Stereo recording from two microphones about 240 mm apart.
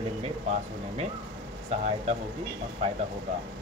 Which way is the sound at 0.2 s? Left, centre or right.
Right.